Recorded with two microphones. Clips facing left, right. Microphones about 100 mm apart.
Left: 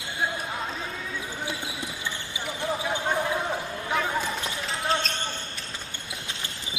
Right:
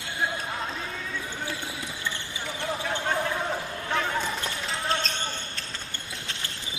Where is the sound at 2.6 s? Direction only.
10° left (ahead or behind).